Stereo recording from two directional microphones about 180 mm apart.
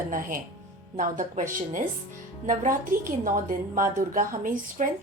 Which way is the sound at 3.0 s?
50° right (ahead or behind).